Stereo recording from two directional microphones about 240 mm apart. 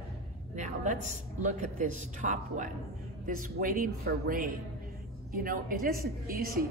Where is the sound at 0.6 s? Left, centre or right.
Right.